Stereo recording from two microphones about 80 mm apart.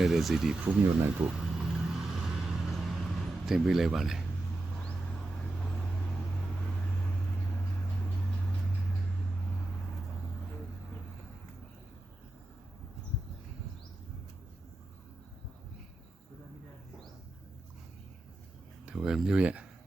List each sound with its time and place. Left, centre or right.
0.0 s speech: centre
0.6 s speech: right
1.4 s vehicle: centre
18.9 s speech: centre